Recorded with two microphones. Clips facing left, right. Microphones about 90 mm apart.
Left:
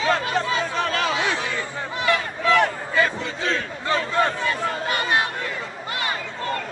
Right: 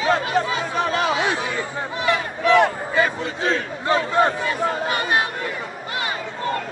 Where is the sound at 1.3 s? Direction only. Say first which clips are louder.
Right 2 dB; 20° right (ahead or behind).